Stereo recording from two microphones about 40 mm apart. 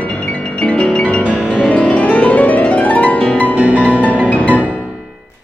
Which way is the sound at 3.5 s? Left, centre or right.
Right.